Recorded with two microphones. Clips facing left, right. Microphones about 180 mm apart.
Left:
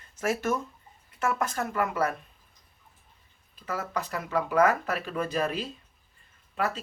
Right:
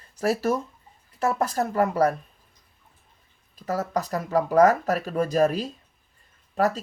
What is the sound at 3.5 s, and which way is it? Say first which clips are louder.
Speech: right 6 dB; 40° right (ahead or behind).